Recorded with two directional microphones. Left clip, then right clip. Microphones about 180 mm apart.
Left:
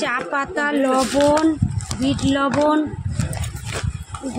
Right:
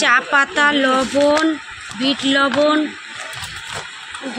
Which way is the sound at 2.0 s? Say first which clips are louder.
Right 4 dB; 15° left (ahead or behind).